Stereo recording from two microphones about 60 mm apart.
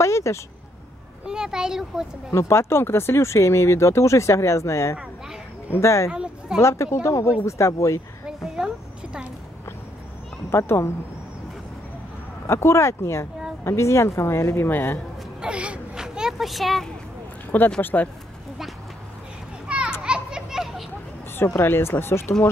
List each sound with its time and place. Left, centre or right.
0.0 s a sound: left
1.2 s a child's voice: centre
2.3 s speech: left
6.0 s a sound: centre
6.6 s speech: left
8.5 s a sound: centre
10.5 s speech: left
12.4 s speech: left
14.7 s a man's voice: left
15.4 s whimper: right; by 16.9 s centre
17.5 s speech: left
19.7 s children playing: centre
21.5 s speech: left